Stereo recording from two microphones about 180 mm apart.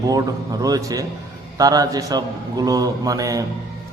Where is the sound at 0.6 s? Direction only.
20° right (ahead or behind).